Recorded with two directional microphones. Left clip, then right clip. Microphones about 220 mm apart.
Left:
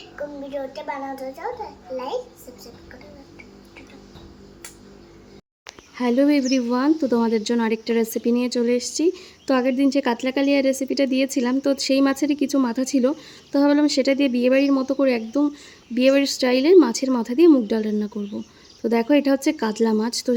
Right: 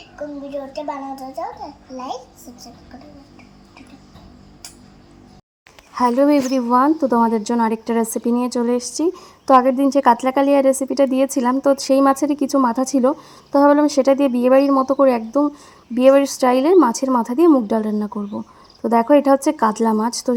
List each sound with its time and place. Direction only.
0.7 s a child's voice: 10° left (ahead or behind)
6.0 s a woman's voice: 10° right (ahead or behind)
19.1 s a woman's voice: 10° right (ahead or behind)